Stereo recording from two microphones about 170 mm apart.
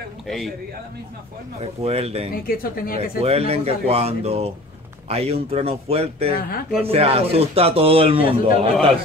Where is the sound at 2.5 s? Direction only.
60° left (ahead or behind).